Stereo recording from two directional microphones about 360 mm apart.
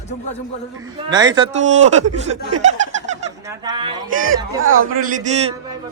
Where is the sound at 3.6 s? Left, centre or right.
Centre.